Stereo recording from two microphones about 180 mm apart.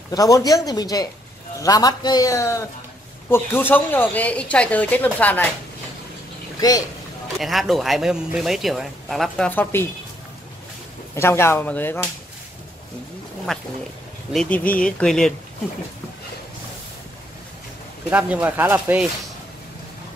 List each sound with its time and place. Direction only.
0.1 s a man's voice: 20° left (ahead or behind)
7.3 s speech: centre (ahead or behind)
11.1 s a woman's voice: 15° left (ahead or behind)
13.5 s speech: centre (ahead or behind)
18.1 s speech: 10° right (ahead or behind)